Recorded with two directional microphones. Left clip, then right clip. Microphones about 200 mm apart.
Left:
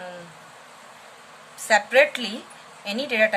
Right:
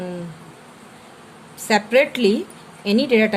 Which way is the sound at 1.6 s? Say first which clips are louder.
Right 1 dB; 15° right (ahead or behind).